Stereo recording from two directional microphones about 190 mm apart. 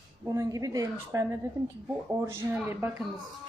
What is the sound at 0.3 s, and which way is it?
A woman's voice, 15° right (ahead or behind).